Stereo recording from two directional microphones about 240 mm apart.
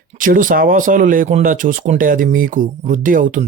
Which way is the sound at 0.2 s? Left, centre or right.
Right.